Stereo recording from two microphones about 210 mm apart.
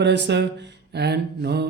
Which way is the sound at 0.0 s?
55° right (ahead or behind).